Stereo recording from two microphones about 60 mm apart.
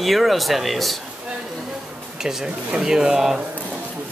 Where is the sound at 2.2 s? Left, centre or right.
Centre.